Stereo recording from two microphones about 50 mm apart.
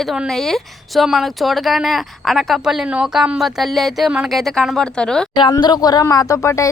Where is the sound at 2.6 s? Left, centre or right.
Centre.